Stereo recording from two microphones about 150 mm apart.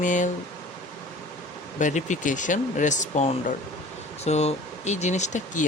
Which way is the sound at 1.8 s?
55° left (ahead or behind).